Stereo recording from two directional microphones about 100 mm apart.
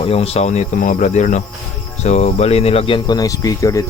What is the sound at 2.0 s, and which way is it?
Speech, 90° left.